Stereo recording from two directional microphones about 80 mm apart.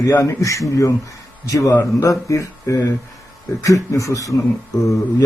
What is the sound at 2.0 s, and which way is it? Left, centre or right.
A man's voice, left.